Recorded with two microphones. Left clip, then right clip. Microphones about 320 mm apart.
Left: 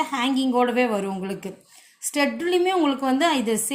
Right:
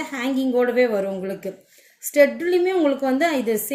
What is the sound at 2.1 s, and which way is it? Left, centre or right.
A woman's voice, left.